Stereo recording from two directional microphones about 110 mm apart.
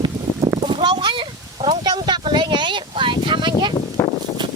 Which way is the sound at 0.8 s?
45° right (ahead or behind).